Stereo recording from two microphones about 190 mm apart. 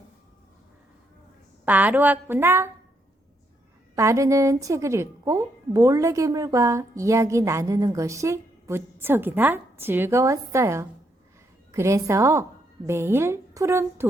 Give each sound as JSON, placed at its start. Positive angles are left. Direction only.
{"t": 1.6, "sound": "a woman's voice", "side_deg": -10}
{"t": 3.9, "sound": "a woman's voice", "side_deg": -15}